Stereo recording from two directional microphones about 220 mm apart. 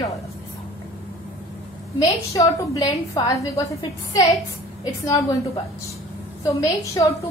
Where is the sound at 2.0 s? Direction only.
15° left (ahead or behind).